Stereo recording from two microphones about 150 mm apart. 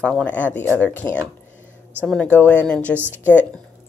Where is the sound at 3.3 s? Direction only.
10° left (ahead or behind).